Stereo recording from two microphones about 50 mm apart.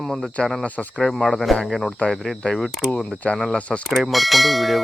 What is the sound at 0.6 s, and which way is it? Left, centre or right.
Speech, left.